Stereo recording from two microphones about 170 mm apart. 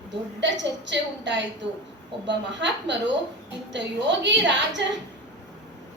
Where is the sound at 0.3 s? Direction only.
90° right.